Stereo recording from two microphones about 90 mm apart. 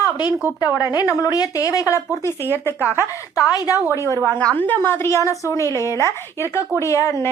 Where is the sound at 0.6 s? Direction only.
45° left (ahead or behind).